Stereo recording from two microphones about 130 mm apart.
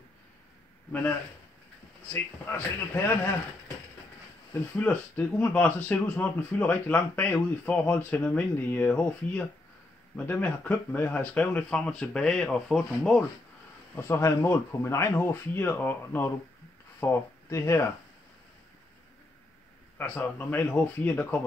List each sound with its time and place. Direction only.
2.4 s speech: 15° left (ahead or behind)
4.6 s speech: 10° left (ahead or behind)
13.9 s speech: 20° left (ahead or behind)
20.0 s speech: 10° left (ahead or behind)